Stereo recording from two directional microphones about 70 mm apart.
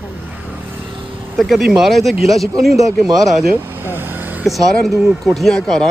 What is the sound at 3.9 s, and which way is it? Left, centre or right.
Vehicle, right.